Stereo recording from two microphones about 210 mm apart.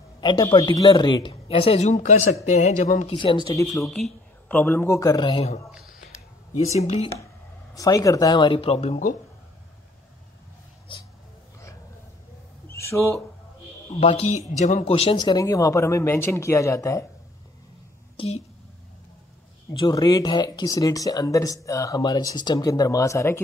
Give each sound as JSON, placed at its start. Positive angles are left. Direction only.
{"t": 0.2, "sound": "speech", "side_deg": 20}
{"t": 3.2, "sound": "speech", "side_deg": 20}
{"t": 3.8, "sound": "speech", "side_deg": 5}
{"t": 6.6, "sound": "speech", "side_deg": 30}
{"t": 7.7, "sound": "speech", "side_deg": 15}
{"t": 10.9, "sound": "speech", "side_deg": 25}
{"t": 12.6, "sound": "a sound", "side_deg": 15}
{"t": 13.8, "sound": "speech", "side_deg": 30}
{"t": 18.1, "sound": "a sound", "side_deg": 30}
{"t": 19.8, "sound": "speech", "side_deg": 20}